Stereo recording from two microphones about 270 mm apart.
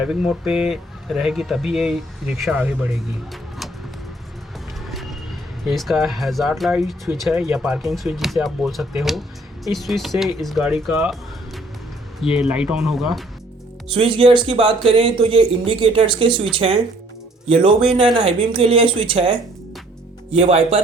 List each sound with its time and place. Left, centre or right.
0.0 s speech: centre
4.9 s vehicle: centre
5.6 s speech: centre
13.9 s speech: centre
20.3 s speech: right